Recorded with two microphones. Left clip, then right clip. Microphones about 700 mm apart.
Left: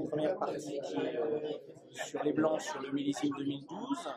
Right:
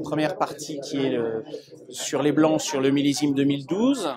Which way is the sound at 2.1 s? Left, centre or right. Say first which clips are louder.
Right 12 dB; right.